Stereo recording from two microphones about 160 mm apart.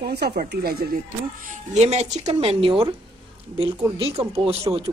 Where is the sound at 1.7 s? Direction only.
45° right (ahead or behind).